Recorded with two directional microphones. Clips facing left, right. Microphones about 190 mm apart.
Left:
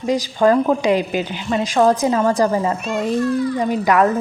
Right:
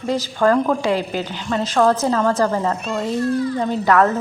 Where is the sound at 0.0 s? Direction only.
15° left (ahead or behind).